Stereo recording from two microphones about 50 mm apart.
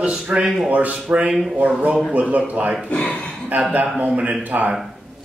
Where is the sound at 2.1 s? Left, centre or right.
Right.